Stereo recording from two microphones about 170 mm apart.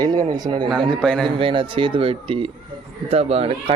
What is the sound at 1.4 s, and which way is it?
A man's voice, 30° right (ahead or behind).